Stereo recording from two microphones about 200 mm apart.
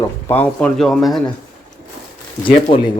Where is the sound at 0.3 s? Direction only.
10° left (ahead or behind).